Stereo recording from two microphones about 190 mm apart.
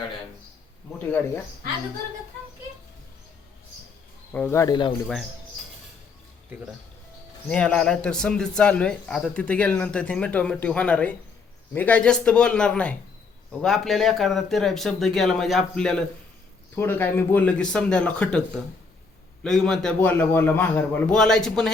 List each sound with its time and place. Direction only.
0.9 s a man's voice: 10° left (ahead or behind)
4.3 s a man's voice: 10° left (ahead or behind)
7.4 s a man's voice: 5° left (ahead or behind)